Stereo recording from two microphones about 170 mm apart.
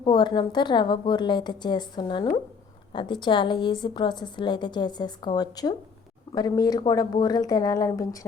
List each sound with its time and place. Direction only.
0.0 s a woman's voice: 25° left (ahead or behind)